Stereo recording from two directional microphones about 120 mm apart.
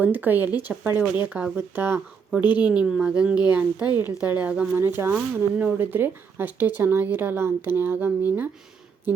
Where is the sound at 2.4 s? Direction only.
40° left (ahead or behind).